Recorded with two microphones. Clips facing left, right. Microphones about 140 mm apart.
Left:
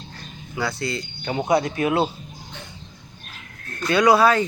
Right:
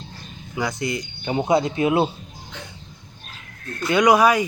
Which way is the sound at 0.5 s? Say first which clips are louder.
Right 1 dB; 20° right (ahead or behind).